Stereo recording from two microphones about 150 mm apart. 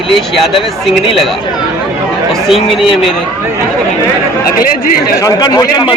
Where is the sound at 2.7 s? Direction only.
Centre (ahead or behind).